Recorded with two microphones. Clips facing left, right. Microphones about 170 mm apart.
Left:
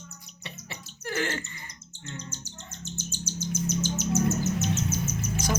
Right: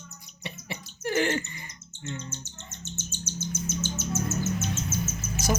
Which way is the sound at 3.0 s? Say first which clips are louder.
Left 1 dB; 10° left (ahead or behind).